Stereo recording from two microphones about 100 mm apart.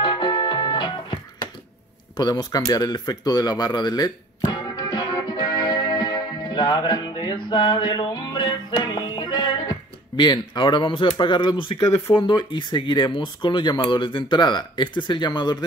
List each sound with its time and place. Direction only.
0.0 s music: 50° left (ahead or behind)
2.1 s speech: 40° left (ahead or behind)
4.5 s music: 45° left (ahead or behind)
12.1 s speech: 55° left (ahead or behind)